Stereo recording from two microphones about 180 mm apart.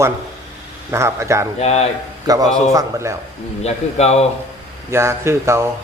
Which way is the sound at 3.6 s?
35° left (ahead or behind).